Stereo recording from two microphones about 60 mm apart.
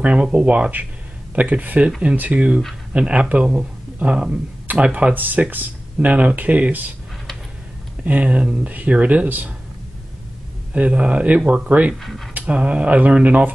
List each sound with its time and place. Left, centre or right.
0.0 s speech: centre
8.0 s speech: right
10.7 s speech: right
12.0 s speech: centre
12.4 s speech: centre